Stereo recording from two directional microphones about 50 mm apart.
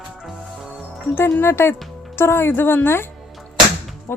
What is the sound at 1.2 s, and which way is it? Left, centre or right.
Speech, left.